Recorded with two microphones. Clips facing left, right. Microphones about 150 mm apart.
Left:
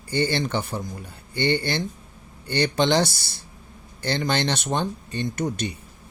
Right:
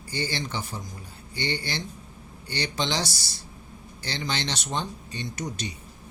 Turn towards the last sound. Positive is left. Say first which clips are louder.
# left 7 dB
turn(degrees=55)  # may be behind; listen again after turning